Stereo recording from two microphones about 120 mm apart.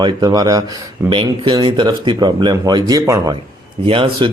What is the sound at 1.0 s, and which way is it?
Speech, 45° right (ahead or behind).